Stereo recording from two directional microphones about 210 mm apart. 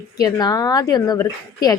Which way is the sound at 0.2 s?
20° left (ahead or behind).